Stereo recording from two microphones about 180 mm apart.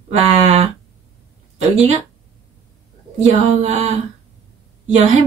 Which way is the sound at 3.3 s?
40° right (ahead or behind).